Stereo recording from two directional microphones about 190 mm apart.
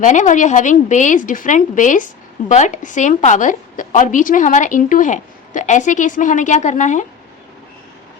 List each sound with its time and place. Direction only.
0.0 s a woman's voice: 40° left (ahead or behind)